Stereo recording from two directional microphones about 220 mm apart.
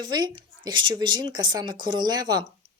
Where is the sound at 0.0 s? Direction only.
20° right (ahead or behind).